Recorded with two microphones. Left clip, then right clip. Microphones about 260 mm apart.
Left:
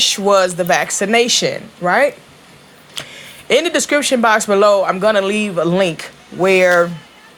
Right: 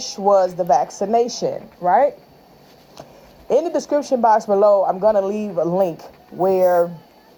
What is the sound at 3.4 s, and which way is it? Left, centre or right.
Speech, left.